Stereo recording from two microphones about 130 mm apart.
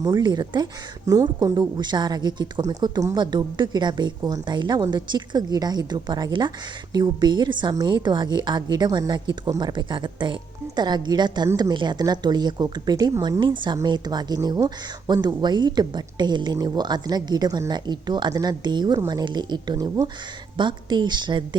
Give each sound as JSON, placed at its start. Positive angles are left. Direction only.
{"t": 0.0, "sound": "speech", "side_deg": -30}